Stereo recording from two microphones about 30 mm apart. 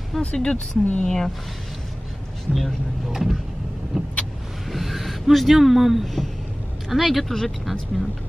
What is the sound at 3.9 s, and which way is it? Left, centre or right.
Vehicle, centre.